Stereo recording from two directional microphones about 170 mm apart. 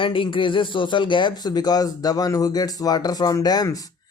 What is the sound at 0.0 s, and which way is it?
A man's voice, 30° left (ahead or behind).